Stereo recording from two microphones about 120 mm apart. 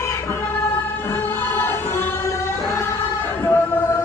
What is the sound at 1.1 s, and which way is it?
Music, 15° left (ahead or behind).